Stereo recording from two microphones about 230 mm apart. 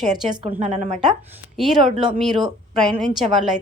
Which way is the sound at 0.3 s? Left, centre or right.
Right.